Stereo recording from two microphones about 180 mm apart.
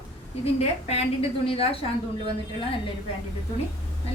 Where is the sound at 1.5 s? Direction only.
30° left (ahead or behind).